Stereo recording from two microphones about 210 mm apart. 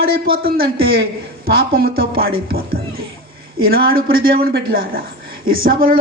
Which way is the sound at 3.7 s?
45° right (ahead or behind).